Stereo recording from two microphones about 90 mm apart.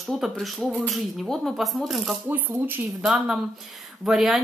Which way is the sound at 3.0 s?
5° right (ahead or behind).